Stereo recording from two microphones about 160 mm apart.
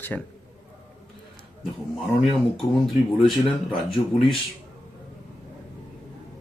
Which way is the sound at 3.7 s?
35° left (ahead or behind).